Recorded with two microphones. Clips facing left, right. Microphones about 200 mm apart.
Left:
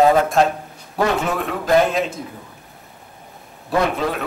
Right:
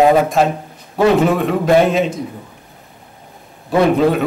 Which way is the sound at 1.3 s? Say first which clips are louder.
Right 5 dB; centre (ahead or behind).